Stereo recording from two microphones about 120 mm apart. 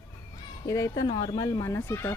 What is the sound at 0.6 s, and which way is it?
Speech, 25° left (ahead or behind).